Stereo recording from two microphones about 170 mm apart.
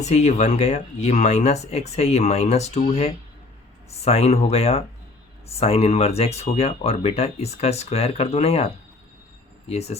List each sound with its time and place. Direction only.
0.0 s speech: 40° left (ahead or behind)